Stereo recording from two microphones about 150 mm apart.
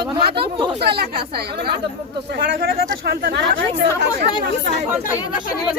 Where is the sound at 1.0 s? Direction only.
90° right.